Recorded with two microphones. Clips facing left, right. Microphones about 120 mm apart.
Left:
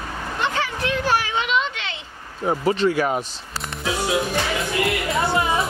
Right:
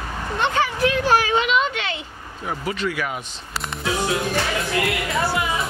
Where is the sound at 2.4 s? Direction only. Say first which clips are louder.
Left 6 dB; 35° left (ahead or behind).